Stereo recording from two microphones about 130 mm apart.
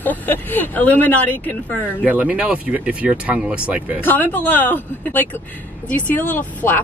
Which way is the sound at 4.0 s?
15° left (ahead or behind).